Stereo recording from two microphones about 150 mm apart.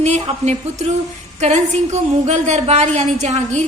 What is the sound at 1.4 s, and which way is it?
A woman's voice, 50° right (ahead or behind).